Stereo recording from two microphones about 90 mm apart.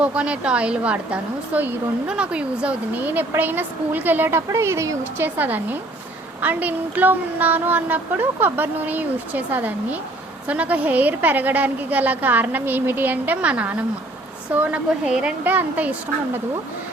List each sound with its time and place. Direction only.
0.0 s a woman's voice: 15° right (ahead or behind)